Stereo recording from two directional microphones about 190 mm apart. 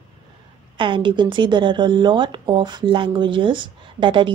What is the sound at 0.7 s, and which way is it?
Speech, 25° right (ahead or behind).